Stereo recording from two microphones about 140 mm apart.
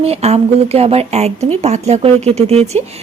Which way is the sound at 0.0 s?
45° right (ahead or behind).